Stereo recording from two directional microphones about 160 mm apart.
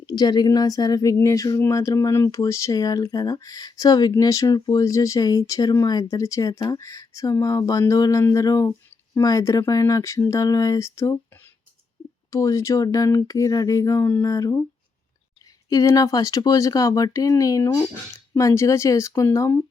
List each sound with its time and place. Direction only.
0.0 s speech: 25° left (ahead or behind)
12.3 s speech: 20° left (ahead or behind)
15.7 s speech: 20° left (ahead or behind)